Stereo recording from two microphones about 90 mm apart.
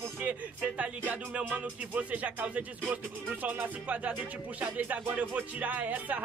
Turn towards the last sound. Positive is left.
turn(degrees=-20)  # may be behind; listen again after turning